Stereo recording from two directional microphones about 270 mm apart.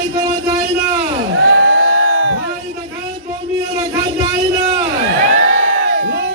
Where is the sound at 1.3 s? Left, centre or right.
Right.